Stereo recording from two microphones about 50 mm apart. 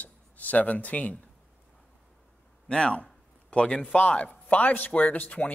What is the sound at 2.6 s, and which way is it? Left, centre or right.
A man's voice, left.